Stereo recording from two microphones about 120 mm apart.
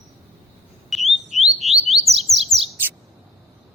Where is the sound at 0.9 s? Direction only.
Centre (ahead or behind).